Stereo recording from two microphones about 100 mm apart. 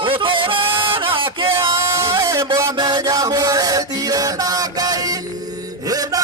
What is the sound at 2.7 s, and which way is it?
Music, 45° right (ahead or behind).